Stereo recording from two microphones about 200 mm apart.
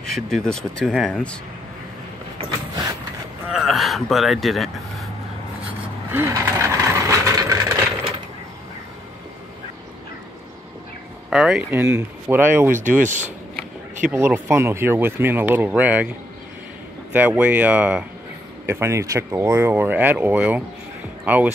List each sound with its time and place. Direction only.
0.0 s speech: centre (ahead or behind)
2.7 s a sound: 20° right (ahead or behind)
3.5 s vehicle: centre (ahead or behind)
6.1 s coin: 15° right (ahead or behind)
11.2 s speech: centre (ahead or behind)
13.0 s speech: 40° right (ahead or behind)
14.1 s speech: 10° right (ahead or behind)
17.1 s speech: 10° right (ahead or behind)